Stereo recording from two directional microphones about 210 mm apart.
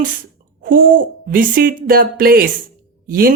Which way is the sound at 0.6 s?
40° right (ahead or behind).